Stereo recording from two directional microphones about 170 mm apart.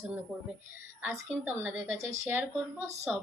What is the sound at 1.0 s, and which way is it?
Speech, 10° right (ahead or behind).